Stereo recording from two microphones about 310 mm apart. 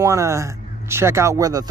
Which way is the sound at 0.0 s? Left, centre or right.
Centre.